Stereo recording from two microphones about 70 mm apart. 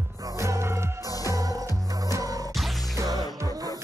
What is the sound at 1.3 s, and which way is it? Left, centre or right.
Music, right.